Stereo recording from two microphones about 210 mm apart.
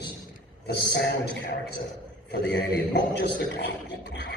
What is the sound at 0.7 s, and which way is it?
Speech, 50° left (ahead or behind).